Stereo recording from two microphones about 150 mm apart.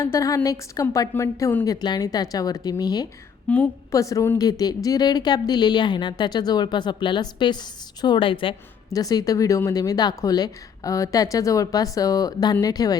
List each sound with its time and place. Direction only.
0.0 s a woman's voice: 20° left (ahead or behind)
3.5 s a woman's voice: 10° left (ahead or behind)
3.9 s a woman's voice: 20° left (ahead or behind)
8.9 s a woman's voice: 25° left (ahead or behind)